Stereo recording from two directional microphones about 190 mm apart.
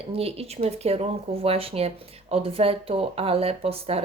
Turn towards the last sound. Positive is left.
turn(degrees=-30)  # may be behind; listen again after turning